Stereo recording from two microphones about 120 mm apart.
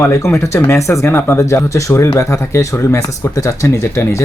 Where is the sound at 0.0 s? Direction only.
20° left (ahead or behind).